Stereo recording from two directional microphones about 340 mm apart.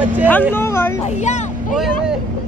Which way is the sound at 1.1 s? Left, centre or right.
Centre.